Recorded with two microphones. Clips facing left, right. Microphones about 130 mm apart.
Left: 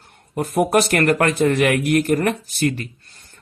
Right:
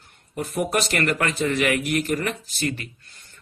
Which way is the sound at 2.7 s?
40° left (ahead or behind).